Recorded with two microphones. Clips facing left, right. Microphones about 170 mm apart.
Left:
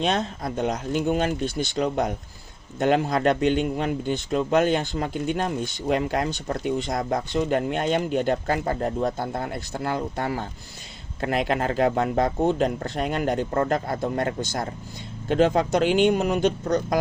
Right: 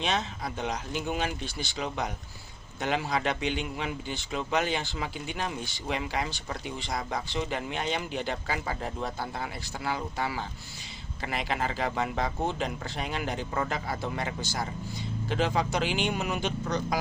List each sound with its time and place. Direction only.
0.2 s speech: 45° left (ahead or behind)